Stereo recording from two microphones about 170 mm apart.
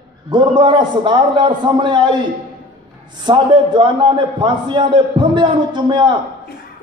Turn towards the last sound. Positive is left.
turn(degrees=-25)  # may be behind; listen again after turning